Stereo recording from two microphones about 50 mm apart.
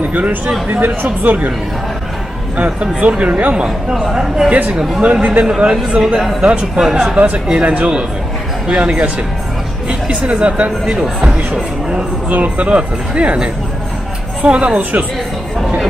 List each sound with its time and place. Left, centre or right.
0.1 s a woman's voice: right
2.5 s speech: right
3.9 s speech: centre
4.5 s speech: right; by 7.2 s centre
7.6 s speech: right
11.0 s speech: centre
12.3 s speech: right
14.8 s a woman's voice: right